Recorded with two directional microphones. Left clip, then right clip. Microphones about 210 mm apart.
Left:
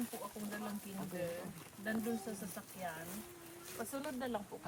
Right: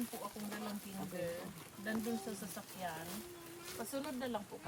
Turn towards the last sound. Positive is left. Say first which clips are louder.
# even
turn(degrees=0)  # may be behind; listen again after turning